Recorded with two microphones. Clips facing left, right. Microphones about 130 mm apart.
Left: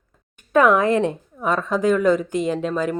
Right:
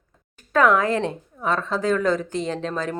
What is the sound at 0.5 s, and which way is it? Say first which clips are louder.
Speech: left 3 dB; 20° left (ahead or behind).